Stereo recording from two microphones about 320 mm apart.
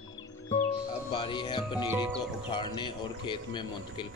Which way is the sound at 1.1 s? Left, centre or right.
Centre.